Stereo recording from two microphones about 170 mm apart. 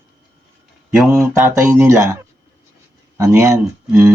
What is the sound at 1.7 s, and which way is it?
Speech, 15° right (ahead or behind).